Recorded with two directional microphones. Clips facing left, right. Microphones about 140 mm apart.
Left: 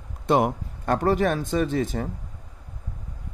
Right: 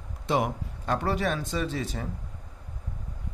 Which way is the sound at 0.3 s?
50° left (ahead or behind).